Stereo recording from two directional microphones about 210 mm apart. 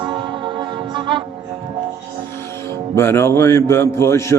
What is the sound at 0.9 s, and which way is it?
Music, 25° right (ahead or behind).